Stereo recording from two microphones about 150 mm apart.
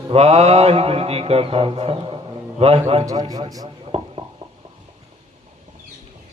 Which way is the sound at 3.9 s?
40° right (ahead or behind).